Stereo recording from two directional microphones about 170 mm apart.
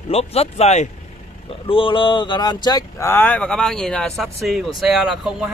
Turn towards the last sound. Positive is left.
turn(degrees=-5)  # may be behind; listen again after turning